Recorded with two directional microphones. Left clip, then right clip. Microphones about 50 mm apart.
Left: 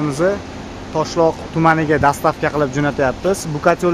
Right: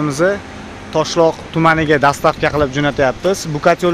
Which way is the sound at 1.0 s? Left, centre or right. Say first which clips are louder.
Right 2 dB; right.